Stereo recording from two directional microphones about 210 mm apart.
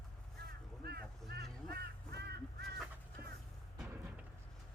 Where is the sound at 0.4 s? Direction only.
50° right (ahead or behind).